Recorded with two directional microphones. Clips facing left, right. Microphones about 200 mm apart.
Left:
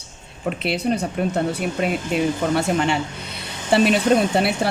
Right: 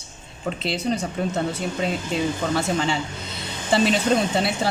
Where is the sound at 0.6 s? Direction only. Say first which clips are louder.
Left 3 dB; 65° left (ahead or behind).